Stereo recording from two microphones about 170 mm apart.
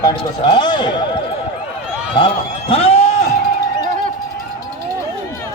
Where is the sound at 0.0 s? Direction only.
25° left (ahead or behind).